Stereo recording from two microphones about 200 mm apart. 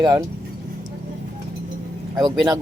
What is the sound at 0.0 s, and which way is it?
Speech, 15° right (ahead or behind).